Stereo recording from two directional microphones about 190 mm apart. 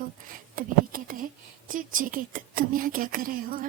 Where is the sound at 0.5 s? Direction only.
45° right (ahead or behind).